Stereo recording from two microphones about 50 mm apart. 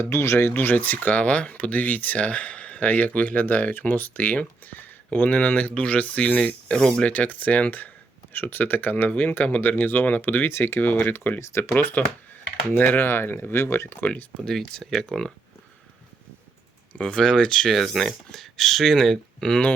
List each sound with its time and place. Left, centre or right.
0.0 s speech: left
0.3 s speech: left
6.7 s speech: centre
7.1 s speech: left
10.5 s speech: left
11.3 s speech: left
11.8 s speech: left
14.0 s speech: left
14.4 s speech: centre
17.0 s speech: centre